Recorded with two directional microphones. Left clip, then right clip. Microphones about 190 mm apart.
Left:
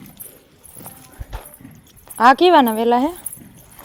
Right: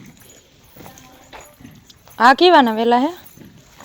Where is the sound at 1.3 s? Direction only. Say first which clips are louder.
Left 1 dB; 25° left (ahead or behind).